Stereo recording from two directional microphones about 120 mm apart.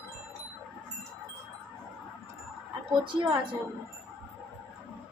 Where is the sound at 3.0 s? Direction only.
45° right (ahead or behind).